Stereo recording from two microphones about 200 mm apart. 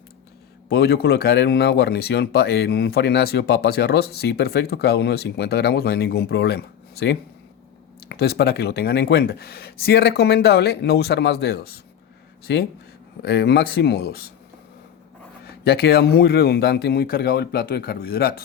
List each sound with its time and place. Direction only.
0.7 s speech: 55° left (ahead or behind)
15.4 s speech: 55° left (ahead or behind)